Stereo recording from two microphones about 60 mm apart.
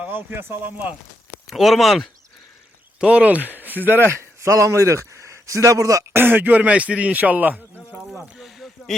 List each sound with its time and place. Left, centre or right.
0.0 s speech: right
1.5 s speech: centre
3.0 s speech: centre; by 4.1 s right
4.1 s a man's voice: right
6.1 s speech: right
8.1 s a sound: centre